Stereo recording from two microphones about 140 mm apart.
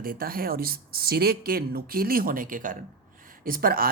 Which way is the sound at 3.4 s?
90° right.